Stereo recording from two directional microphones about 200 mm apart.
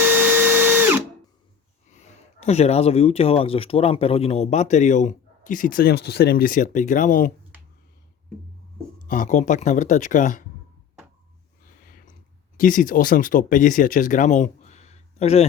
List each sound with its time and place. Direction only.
0.0 s drill: 10° right (ahead or behind)
1.9 s speech: 35° left (ahead or behind)
9.0 s speech: 40° left (ahead or behind)
12.5 s speech: 40° left (ahead or behind)